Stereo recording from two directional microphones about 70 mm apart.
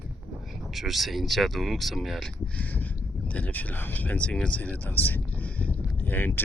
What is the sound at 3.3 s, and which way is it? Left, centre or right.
Speech, left.